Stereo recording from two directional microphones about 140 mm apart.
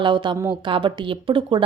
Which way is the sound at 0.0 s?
35° right (ahead or behind).